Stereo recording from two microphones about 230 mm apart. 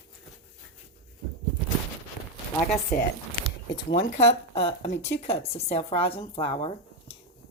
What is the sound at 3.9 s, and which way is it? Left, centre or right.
Speech, left.